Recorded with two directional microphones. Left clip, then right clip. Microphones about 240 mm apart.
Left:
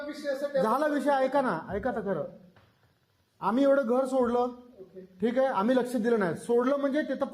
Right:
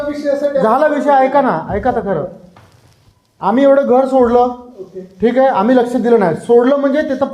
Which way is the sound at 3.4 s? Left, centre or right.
Left.